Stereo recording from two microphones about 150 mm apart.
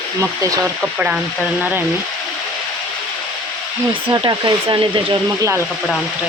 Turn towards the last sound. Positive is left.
turn(degrees=-30)  # may be behind; listen again after turning